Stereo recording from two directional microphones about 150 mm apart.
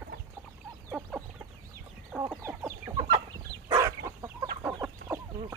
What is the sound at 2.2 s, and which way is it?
Chicken, 15° right (ahead or behind).